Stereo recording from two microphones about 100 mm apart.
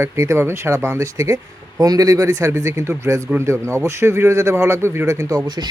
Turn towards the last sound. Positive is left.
turn(degrees=-35)  # may be behind; listen again after turning